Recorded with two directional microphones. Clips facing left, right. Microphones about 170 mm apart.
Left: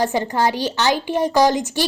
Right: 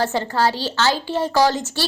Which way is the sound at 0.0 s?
15° left (ahead or behind).